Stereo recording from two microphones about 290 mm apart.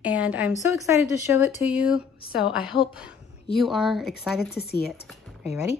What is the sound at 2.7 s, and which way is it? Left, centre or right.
Speech, centre.